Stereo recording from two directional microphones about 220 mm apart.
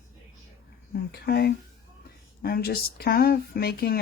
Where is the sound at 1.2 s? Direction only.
45° left (ahead or behind).